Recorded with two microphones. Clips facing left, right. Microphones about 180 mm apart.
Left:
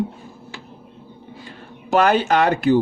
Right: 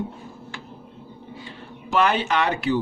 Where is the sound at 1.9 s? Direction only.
45° left (ahead or behind).